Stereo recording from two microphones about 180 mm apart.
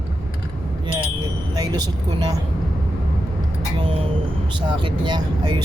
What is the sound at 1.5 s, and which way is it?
Vehicle, 20° right (ahead or behind).